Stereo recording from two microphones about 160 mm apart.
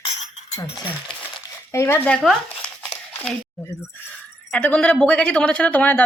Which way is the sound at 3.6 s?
15° left (ahead or behind).